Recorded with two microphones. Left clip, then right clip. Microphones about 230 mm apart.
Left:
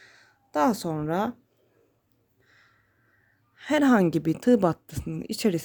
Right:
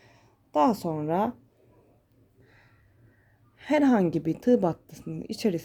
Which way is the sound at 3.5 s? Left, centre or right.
Centre.